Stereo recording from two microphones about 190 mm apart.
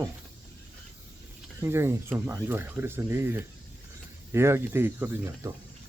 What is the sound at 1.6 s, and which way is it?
Speech, 15° right (ahead or behind).